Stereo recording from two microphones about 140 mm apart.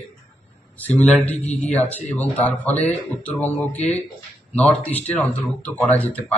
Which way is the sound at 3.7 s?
50° left (ahead or behind).